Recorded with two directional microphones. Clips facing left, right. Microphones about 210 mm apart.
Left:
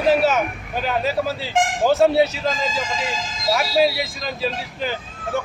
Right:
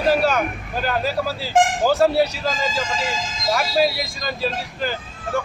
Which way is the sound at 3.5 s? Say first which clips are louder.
Left 1 dB; centre (ahead or behind).